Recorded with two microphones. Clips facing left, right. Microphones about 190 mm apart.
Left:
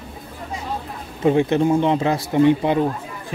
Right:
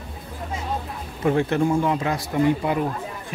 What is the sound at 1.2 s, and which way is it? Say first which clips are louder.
A man's voice: left 4 dB; 20° left (ahead or behind).